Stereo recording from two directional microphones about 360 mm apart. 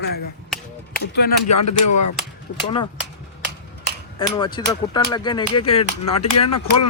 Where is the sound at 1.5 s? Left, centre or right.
Left.